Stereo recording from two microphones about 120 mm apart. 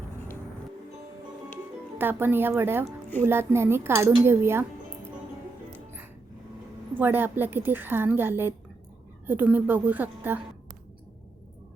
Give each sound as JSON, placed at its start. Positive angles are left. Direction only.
{"t": 2.0, "sound": "a woman's voice", "side_deg": -15}
{"t": 7.0, "sound": "a woman's voice", "side_deg": -15}